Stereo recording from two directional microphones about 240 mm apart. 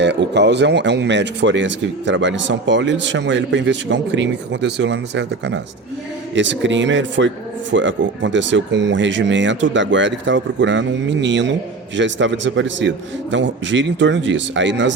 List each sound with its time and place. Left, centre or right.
0.0 s speech: right